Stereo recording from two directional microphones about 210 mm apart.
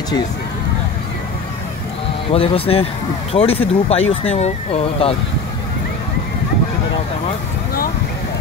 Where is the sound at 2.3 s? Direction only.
25° left (ahead or behind).